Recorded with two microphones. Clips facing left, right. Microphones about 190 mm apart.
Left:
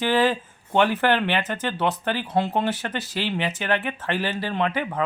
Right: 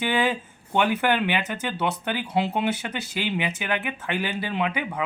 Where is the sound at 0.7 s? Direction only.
10° right (ahead or behind).